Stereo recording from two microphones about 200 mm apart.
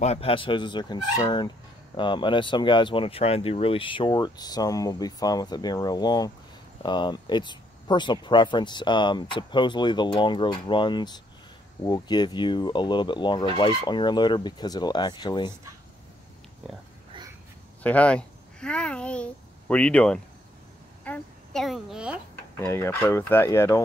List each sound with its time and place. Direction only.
0.0 s speech: 30° left (ahead or behind)
17.8 s a child's voice: 5° left (ahead or behind)
22.6 s speech: 15° left (ahead or behind)